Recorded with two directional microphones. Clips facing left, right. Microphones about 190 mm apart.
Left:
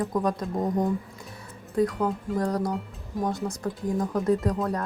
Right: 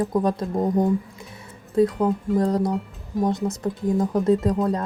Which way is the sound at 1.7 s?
25° right (ahead or behind).